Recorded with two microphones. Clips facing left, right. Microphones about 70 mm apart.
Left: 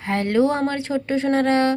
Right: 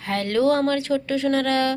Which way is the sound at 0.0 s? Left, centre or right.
Left.